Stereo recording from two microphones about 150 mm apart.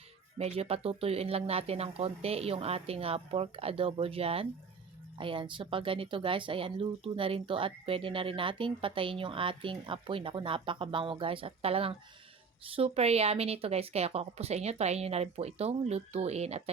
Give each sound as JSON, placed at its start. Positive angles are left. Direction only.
{"t": 0.3, "sound": "a woman's voice", "side_deg": -40}